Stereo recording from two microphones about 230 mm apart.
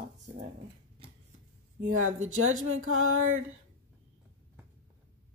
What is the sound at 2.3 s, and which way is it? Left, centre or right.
Music, right.